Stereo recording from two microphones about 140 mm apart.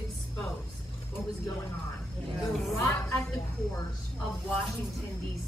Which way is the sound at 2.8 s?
25° left (ahead or behind).